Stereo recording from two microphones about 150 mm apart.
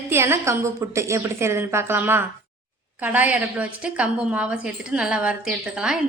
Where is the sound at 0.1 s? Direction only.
15° right (ahead or behind).